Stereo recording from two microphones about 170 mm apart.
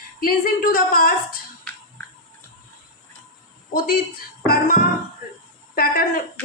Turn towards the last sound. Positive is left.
turn(degrees=60)  # may be behind; listen again after turning